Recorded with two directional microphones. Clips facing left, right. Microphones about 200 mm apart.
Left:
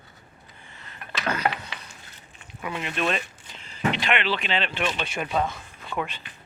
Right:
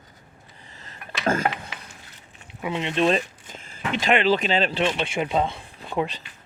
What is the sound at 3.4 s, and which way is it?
Speech, 45° right (ahead or behind).